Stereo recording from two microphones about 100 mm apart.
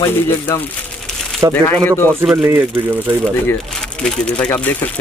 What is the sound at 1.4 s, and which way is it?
Speech, 35° right (ahead or behind).